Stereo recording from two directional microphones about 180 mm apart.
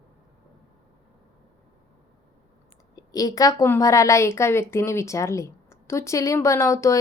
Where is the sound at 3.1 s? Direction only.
20° left (ahead or behind).